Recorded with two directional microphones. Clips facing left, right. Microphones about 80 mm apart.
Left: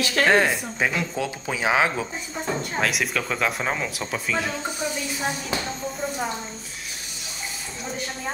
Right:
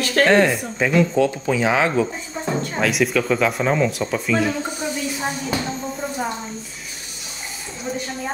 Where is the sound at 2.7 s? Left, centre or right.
Centre.